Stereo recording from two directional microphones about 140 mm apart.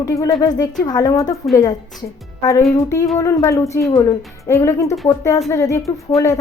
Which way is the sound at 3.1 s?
20° left (ahead or behind).